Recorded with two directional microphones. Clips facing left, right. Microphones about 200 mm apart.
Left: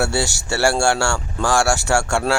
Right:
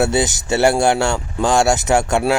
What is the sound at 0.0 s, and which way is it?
Speech, 20° right (ahead or behind).